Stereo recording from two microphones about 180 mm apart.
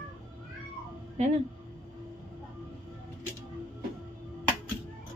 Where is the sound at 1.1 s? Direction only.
40° right (ahead or behind).